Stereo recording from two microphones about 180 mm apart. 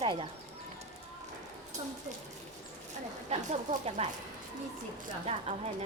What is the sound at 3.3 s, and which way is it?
Speech, 35° right (ahead or behind).